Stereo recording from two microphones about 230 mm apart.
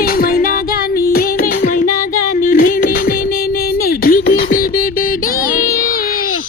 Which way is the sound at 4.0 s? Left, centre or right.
Left.